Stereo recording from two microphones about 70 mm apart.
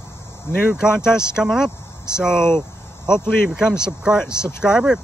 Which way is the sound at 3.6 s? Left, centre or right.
Centre.